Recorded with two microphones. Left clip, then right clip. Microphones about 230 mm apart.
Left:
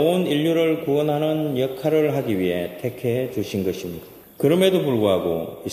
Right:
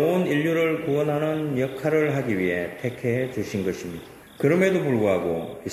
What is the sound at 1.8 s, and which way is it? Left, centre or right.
Speech, left.